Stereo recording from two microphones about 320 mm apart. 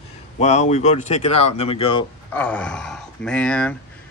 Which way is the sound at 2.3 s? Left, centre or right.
Centre.